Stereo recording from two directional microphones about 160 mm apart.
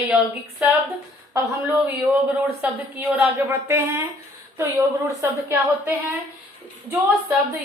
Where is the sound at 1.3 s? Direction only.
10° right (ahead or behind).